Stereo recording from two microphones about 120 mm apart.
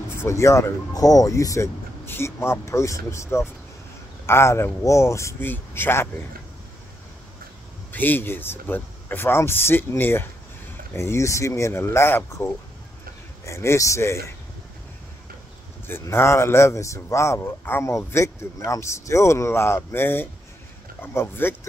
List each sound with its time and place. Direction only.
0.2 s speech: 25° left (ahead or behind)
7.9 s speech: 15° left (ahead or behind)
13.5 s speech: 20° left (ahead or behind)
15.9 s speech: 20° left (ahead or behind)